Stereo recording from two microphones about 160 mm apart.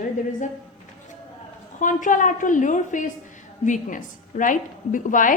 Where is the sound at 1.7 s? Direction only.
55° left (ahead or behind).